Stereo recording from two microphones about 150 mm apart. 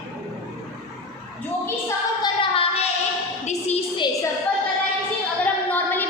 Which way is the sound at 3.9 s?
30° left (ahead or behind).